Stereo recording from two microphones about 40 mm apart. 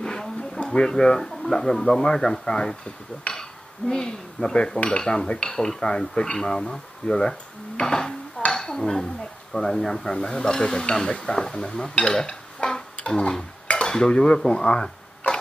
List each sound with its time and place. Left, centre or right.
0.0 s a sound: centre
0.7 s speech: centre
2.4 s dishes: centre
3.3 s cutlery: centre
4.9 s dishes: centre
6.4 s speech: centre
8.5 s dishes: centre
9.5 s speech: centre
13.2 s dishes: left
14.5 s a sound: left